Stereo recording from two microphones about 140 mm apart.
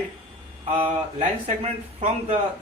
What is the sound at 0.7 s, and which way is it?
A man's voice, 50° right (ahead or behind).